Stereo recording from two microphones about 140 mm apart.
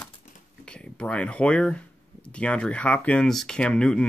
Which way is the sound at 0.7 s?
5° left (ahead or behind).